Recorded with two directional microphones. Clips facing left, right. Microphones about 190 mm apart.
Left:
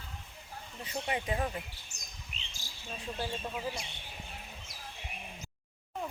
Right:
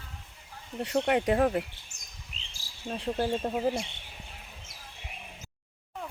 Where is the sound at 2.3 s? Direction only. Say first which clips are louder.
Right 1 dB; 25° right (ahead or behind).